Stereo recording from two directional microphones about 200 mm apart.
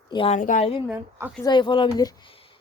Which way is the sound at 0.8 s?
10° right (ahead or behind).